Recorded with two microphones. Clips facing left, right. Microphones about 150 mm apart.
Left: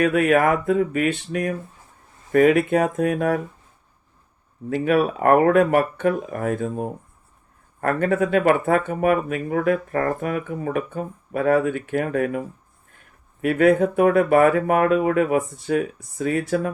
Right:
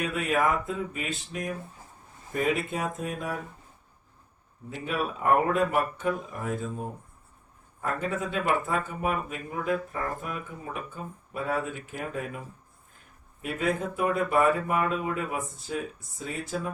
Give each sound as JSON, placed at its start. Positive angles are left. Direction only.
{"t": 0.0, "sound": "speech", "side_deg": 65}
{"t": 4.7, "sound": "speech", "side_deg": 65}